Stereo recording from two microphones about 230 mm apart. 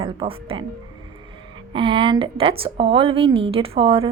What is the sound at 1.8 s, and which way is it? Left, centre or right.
A woman's voice, right.